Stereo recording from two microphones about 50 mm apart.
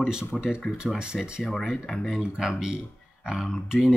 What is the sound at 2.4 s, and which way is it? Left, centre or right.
Speech, centre.